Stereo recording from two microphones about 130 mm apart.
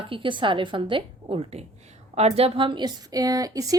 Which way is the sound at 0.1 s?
40° right (ahead or behind).